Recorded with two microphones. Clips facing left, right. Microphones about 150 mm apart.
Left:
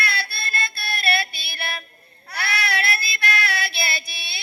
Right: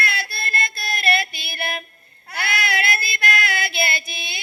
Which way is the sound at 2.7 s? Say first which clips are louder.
Right 2 dB; 50° right (ahead or behind).